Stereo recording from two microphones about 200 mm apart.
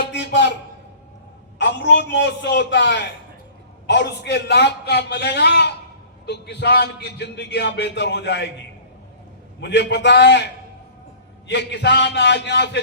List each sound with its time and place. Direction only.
0.0 s a sound: 60° left (ahead or behind)
1.5 s a man's voice: 60° left (ahead or behind)
9.6 s a man's voice: 60° left (ahead or behind)